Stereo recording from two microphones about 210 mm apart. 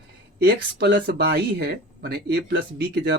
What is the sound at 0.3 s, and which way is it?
Speech, 50° right (ahead or behind).